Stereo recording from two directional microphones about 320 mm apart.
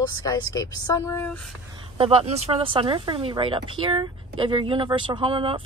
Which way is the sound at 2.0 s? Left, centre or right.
Centre.